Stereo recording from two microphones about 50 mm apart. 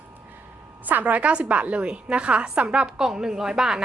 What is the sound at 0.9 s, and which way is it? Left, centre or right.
A woman's voice, right.